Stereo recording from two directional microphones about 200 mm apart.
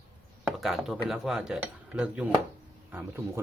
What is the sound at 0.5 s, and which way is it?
A man's voice, centre (ahead or behind).